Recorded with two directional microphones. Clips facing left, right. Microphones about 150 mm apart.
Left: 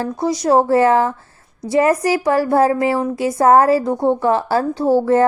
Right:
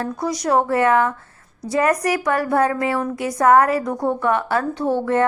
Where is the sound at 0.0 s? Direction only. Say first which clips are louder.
Left 4 dB; 25° left (ahead or behind).